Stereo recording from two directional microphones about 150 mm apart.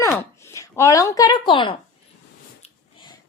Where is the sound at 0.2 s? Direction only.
20° left (ahead or behind).